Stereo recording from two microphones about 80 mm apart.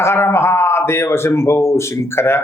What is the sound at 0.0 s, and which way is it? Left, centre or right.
A man's voice, left.